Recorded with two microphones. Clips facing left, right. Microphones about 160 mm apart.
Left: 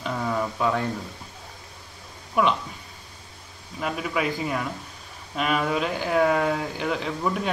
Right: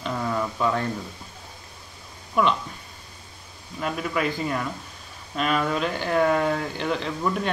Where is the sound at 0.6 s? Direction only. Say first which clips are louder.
Even; centre (ahead or behind).